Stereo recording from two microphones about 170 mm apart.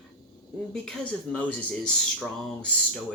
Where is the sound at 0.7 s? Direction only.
5° left (ahead or behind).